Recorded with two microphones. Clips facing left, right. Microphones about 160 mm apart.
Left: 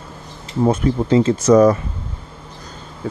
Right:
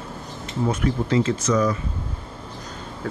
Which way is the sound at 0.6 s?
30° left (ahead or behind).